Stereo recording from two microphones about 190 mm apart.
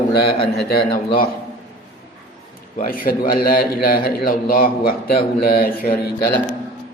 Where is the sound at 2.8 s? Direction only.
50° left (ahead or behind).